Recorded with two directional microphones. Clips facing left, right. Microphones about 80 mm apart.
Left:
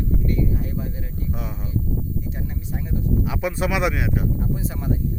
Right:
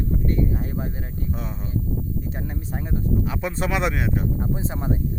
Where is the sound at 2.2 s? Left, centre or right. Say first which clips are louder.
Right 1 dB; right.